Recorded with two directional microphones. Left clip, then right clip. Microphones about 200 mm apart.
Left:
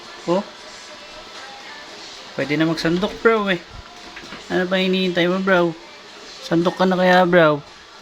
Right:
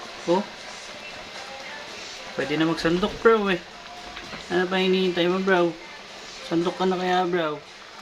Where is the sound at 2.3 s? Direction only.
20° left (ahead or behind); by 7.5 s 40° left (ahead or behind).